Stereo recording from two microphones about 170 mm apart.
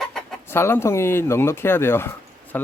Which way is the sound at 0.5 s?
15° left (ahead or behind).